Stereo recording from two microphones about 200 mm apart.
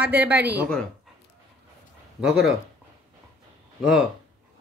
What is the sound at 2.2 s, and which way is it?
Speech, 5° right (ahead or behind).